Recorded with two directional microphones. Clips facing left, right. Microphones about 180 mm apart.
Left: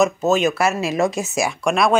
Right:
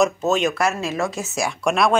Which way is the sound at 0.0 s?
Centre (ahead or behind).